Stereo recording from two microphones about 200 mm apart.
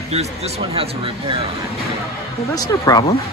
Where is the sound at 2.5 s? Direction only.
20° left (ahead or behind).